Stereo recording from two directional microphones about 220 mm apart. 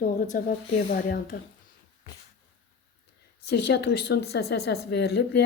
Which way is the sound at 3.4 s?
50° left (ahead or behind).